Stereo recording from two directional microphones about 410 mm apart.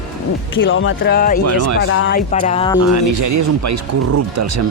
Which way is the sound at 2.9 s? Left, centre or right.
Right.